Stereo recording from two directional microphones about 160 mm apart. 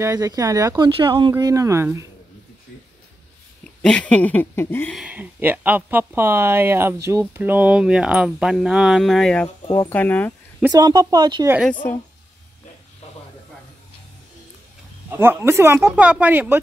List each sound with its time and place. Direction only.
0.0 s speech: 20° right (ahead or behind)
1.3 s speech: 20° right (ahead or behind)
3.8 s speech: 5° left (ahead or behind)
4.9 s speech: 10° right (ahead or behind); by 10.3 s 10° left (ahead or behind)
10.7 s speech: 25° right (ahead or behind)
11.8 s speech: 15° left (ahead or behind)
15.0 s speech: 15° right (ahead or behind)